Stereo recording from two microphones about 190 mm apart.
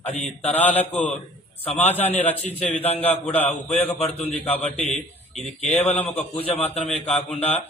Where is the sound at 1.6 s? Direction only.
35° left (ahead or behind).